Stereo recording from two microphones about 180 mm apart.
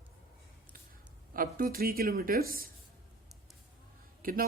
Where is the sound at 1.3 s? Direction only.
55° right (ahead or behind).